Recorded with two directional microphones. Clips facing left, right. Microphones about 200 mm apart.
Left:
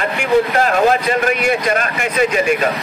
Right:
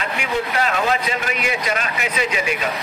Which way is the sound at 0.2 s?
50° left (ahead or behind).